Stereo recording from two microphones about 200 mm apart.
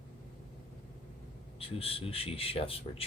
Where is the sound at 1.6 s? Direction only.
30° left (ahead or behind).